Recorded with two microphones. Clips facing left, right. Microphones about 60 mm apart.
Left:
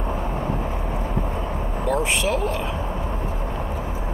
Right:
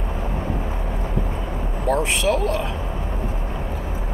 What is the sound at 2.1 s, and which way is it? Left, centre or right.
Speech, left.